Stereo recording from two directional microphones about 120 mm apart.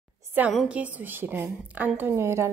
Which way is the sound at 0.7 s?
10° right (ahead or behind).